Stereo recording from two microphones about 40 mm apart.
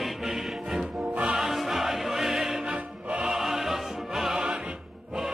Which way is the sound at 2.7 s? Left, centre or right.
Right.